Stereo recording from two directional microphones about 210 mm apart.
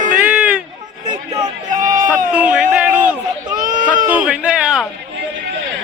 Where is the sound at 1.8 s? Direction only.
15° right (ahead or behind).